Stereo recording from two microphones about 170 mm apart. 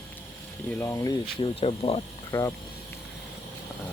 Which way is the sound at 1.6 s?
35° left (ahead or behind).